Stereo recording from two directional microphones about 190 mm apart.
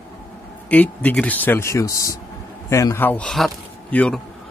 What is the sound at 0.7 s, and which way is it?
A man's voice, 10° left (ahead or behind).